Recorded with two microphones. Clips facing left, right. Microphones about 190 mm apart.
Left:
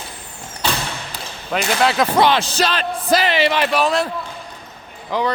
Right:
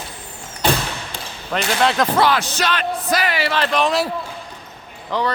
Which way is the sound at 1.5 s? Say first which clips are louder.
Left 1 dB; 5° left (ahead or behind).